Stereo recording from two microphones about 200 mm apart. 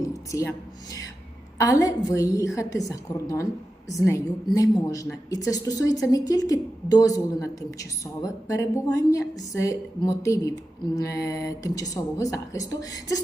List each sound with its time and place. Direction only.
0.0 s a woman's voice: 15° left (ahead or behind)